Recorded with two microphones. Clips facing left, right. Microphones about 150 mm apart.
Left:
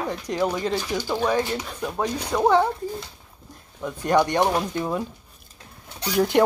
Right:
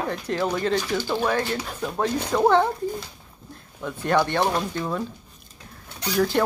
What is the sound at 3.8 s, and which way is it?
Speech, 10° left (ahead or behind).